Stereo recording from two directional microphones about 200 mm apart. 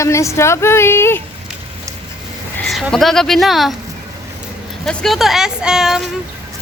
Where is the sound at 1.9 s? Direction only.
15° right (ahead or behind).